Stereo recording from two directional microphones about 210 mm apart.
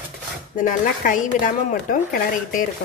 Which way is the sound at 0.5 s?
40° left (ahead or behind).